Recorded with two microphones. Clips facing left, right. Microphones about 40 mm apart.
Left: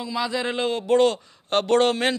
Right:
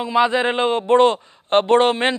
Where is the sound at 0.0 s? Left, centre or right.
Right.